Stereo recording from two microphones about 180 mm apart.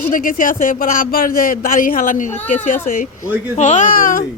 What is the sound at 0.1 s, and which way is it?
A man's voice, 50° left (ahead or behind).